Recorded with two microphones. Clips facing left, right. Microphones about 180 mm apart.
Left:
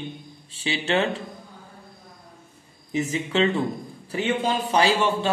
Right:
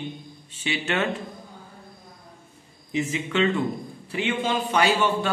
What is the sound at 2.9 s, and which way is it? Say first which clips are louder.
A man's voice: left 1 dB; 40° left (ahead or behind).